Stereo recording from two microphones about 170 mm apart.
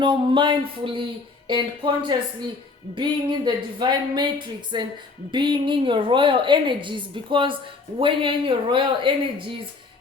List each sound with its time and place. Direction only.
0.0 s a woman's voice: 30° right (ahead or behind)